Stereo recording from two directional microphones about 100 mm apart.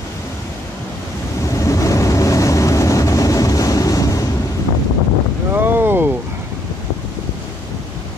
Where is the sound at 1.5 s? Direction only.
30° left (ahead or behind).